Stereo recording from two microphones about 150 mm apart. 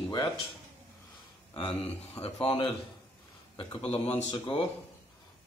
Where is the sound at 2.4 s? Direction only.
35° left (ahead or behind).